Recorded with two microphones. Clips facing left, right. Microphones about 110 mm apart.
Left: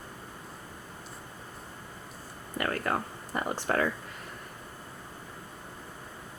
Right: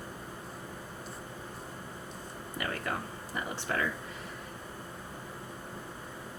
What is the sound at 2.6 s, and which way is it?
Speech, 55° left (ahead or behind).